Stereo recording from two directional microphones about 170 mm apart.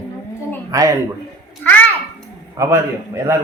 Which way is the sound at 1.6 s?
10° left (ahead or behind).